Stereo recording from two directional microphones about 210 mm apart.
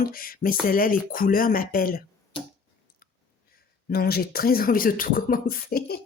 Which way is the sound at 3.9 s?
45° left (ahead or behind).